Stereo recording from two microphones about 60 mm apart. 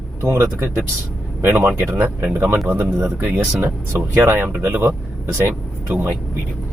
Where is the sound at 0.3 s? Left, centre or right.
Right.